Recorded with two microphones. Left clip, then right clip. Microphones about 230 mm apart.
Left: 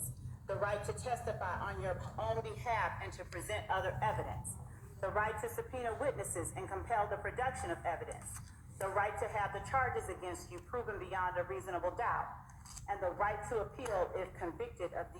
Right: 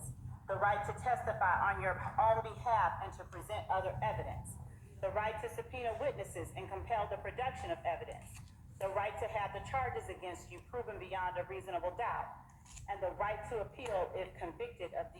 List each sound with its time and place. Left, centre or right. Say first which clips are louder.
0.4 s a woman's voice: right 3 dB; left